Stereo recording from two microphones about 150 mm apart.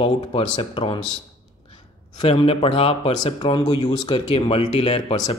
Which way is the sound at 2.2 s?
40° left (ahead or behind).